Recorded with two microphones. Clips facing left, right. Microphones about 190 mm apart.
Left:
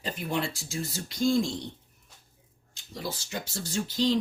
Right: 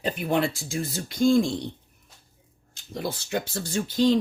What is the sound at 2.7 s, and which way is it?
Speech, 55° right (ahead or behind).